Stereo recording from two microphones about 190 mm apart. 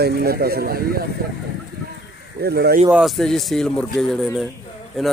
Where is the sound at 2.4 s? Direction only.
60° right (ahead or behind).